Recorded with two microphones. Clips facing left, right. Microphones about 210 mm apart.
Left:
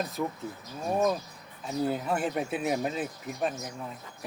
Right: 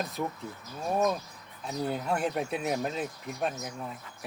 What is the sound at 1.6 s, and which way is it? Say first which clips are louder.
Speech: left 2 dB; centre (ahead or behind).